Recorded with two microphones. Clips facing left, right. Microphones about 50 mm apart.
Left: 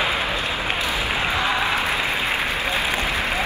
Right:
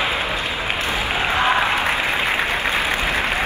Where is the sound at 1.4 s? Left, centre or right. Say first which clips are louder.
Right 6 dB; right.